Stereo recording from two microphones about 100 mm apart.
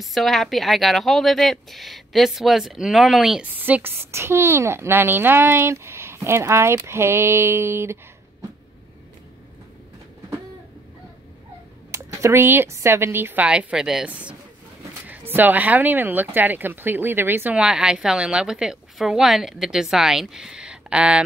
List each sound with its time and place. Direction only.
0.0 s speech: centre (ahead or behind)
3.5 s a woman's voice: 15° right (ahead or behind)
11.9 s a woman's voice: 30° right (ahead or behind); by 14.1 s 5° right (ahead or behind)
15.0 s a woman's voice: 20° right (ahead or behind)
17.6 s a woman's voice: 5° right (ahead or behind)